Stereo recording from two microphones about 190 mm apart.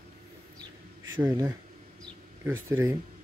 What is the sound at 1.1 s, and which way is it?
Speech, 15° right (ahead or behind).